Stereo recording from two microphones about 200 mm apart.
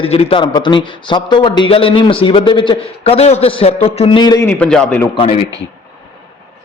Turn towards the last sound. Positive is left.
turn(degrees=30)  # may be behind; listen again after turning